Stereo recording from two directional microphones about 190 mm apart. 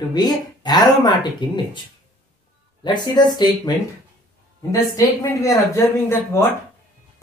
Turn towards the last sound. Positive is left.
turn(degrees=15)  # may be behind; listen again after turning